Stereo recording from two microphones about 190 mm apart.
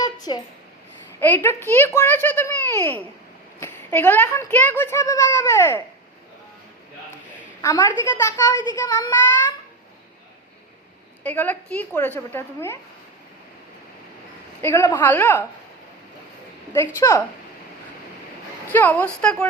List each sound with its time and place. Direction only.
0.0 s a sound: 20° left (ahead or behind)
1.2 s a child's voice: 10° left (ahead or behind)
7.6 s speech: 20° left (ahead or behind)
11.2 s a child's voice: 10° left (ahead or behind)
14.6 s a child's voice: 10° left (ahead or behind)
16.7 s a child's voice: 15° left (ahead or behind)
18.7 s a child's voice: 10° left (ahead or behind)